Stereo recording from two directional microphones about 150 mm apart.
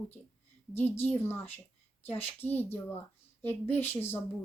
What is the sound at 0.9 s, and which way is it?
Speech, 45° left (ahead or behind).